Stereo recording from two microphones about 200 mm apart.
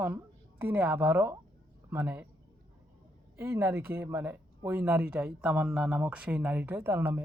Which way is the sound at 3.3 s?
10° right (ahead or behind).